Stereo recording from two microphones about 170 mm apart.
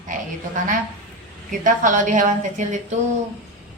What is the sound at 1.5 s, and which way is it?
A woman's voice, 50° right (ahead or behind).